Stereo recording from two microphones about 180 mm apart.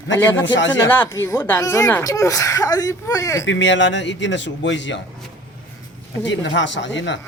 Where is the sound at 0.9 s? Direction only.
10° left (ahead or behind).